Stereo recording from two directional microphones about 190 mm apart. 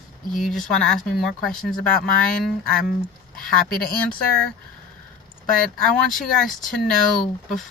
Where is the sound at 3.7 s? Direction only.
5° left (ahead or behind).